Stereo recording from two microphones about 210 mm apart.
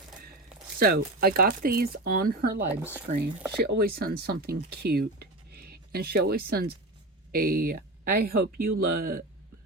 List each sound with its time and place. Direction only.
0.8 s speech: 45° right (ahead or behind)
2.8 s speech: 10° right (ahead or behind)
3.6 s speech: 45° right (ahead or behind)